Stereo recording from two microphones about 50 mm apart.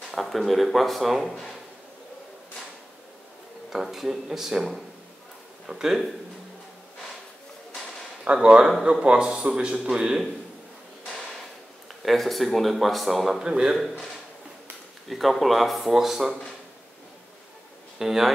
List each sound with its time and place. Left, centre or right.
0.1 s speech: centre
3.7 s speech: centre
8.2 s speech: centre
12.0 s speech: centre
13.7 s a sound: centre
15.0 s speech: centre
17.9 s speech: centre